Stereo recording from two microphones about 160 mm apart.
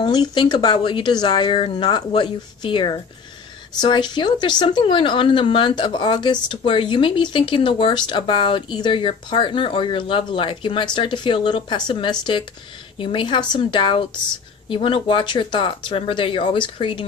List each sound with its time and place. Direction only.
0.0 s speech: 30° left (ahead or behind)